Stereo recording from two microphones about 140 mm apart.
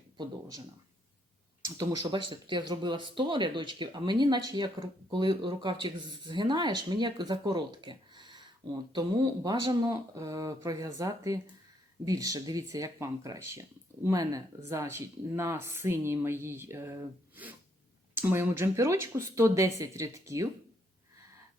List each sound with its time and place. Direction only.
0.2 s speech: 25° right (ahead or behind)
1.6 s speech: 25° right (ahead or behind)